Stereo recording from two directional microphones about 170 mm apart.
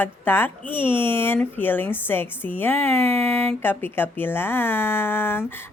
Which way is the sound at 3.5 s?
10° left (ahead or behind).